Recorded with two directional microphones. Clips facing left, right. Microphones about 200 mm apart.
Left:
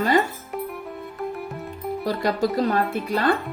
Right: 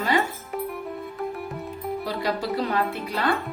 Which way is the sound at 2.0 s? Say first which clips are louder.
Left 6 dB; 45° left (ahead or behind).